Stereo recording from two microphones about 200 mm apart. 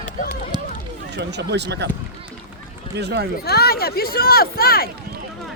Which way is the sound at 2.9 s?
55° right (ahead or behind).